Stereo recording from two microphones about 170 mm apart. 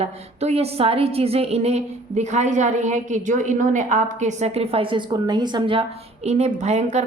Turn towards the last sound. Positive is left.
turn(degrees=-40)  # may be behind; listen again after turning